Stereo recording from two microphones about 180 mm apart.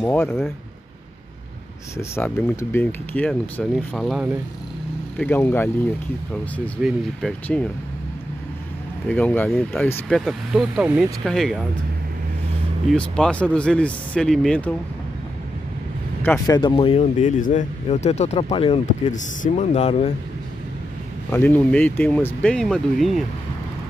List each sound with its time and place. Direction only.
0.0 s speech: 10° left (ahead or behind)
2.0 s speech: 15° left (ahead or behind)
6.8 s speech: centre (ahead or behind)
9.0 s speech: 5° left (ahead or behind)
12.9 s speech: 5° left (ahead or behind)
16.2 s speech: 10° left (ahead or behind)
16.5 s speech: 25° left (ahead or behind)
18.9 s speech: 45° left (ahead or behind)
21.3 s speech: 10° left (ahead or behind)